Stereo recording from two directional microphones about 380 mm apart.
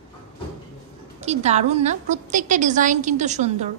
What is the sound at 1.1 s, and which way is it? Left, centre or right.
A woman's voice, centre.